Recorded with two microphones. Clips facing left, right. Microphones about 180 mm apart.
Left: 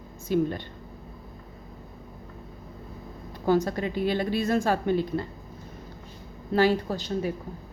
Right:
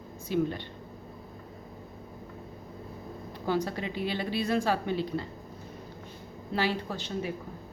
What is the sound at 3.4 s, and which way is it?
A woman's voice, 45° left (ahead or behind).